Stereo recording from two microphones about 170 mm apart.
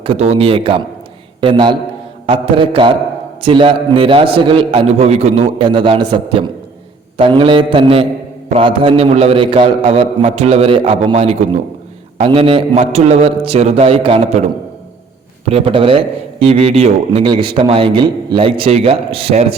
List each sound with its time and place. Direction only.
0.0 s a man's voice: 35° right (ahead or behind)
5.6 s a man's voice: 30° right (ahead or behind)